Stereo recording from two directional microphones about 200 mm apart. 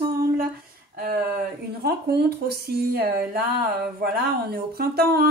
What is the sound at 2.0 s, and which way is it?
Speech, 55° right (ahead or behind).